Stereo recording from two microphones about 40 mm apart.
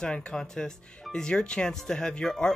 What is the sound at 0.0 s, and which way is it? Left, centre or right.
Speech, left.